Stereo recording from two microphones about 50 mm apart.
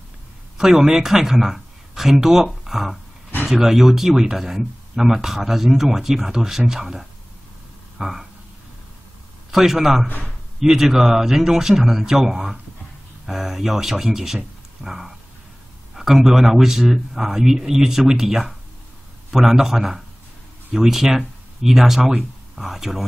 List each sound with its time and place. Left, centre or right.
0.6 s speech: centre
8.0 s a sound: centre
9.5 s speech: centre
10.0 s a man's voice: left
10.6 s speech: centre